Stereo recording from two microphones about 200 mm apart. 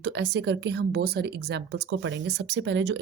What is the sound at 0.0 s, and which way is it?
Speech, 60° right (ahead or behind).